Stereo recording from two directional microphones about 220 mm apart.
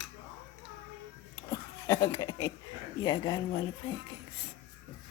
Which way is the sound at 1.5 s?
15° left (ahead or behind).